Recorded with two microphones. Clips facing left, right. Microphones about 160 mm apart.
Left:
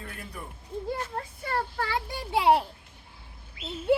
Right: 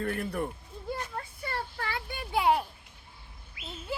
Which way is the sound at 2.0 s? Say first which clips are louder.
Left 3 dB; 90° left.